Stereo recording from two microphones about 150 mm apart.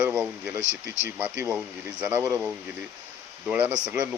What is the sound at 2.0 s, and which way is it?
Speech, 15° right (ahead or behind).